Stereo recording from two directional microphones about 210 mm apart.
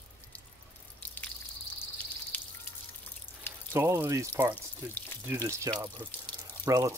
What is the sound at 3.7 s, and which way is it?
Speech, 10° right (ahead or behind).